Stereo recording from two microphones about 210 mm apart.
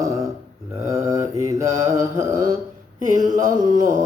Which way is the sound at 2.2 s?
15° right (ahead or behind).